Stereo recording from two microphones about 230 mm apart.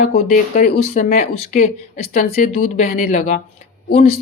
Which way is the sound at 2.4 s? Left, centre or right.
Left.